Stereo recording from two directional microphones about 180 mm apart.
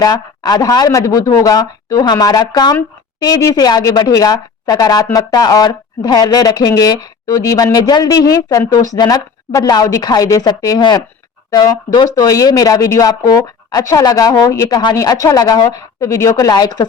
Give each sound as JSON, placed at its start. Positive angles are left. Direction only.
{"t": 0.0, "sound": "speech", "side_deg": 20}